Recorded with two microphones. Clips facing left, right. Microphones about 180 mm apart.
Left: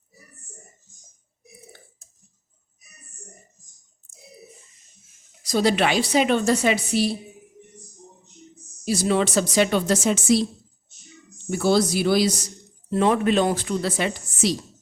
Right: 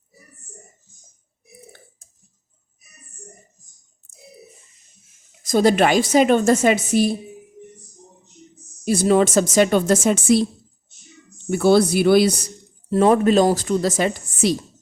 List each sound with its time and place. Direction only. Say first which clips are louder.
5.4 s a woman's voice: right 5 dB; 50° right (ahead or behind)
8.8 s a woman's voice: right 5 dB; 50° right (ahead or behind)
11.5 s speech: right 5 dB; 55° right (ahead or behind)
12.9 s a woman's voice: right 5 dB; 40° right (ahead or behind)